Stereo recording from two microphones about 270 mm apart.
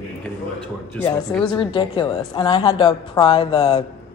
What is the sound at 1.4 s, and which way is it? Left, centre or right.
A woman's voice, centre.